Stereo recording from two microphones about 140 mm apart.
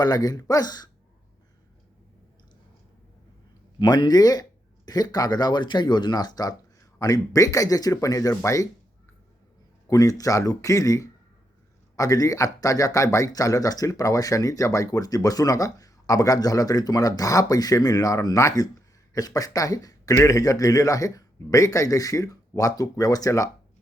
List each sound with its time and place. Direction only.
0.0 s speech: 30° left (ahead or behind)
3.8 s speech: 30° left (ahead or behind)
9.8 s speech: 25° left (ahead or behind)